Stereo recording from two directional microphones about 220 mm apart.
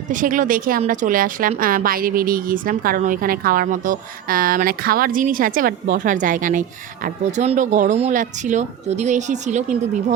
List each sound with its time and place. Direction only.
0.1 s a woman's voice: 35° right (ahead or behind)